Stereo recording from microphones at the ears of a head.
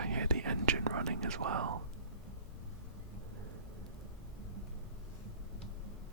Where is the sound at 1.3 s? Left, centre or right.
Right.